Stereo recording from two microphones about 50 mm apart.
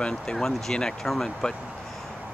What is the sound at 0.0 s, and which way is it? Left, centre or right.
Speech, centre.